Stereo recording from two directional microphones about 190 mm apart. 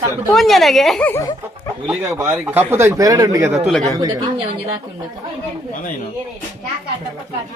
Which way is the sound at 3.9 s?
20° right (ahead or behind).